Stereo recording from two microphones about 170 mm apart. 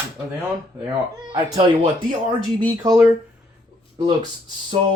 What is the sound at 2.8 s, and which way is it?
Speech, 20° right (ahead or behind).